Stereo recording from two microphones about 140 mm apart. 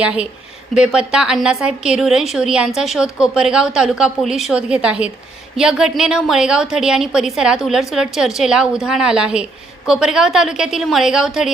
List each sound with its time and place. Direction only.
0.0 s a woman's voice: 10° right (ahead or behind)